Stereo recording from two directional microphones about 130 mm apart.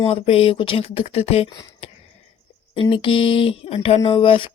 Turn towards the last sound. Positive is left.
turn(degrees=40)  # may be behind; listen again after turning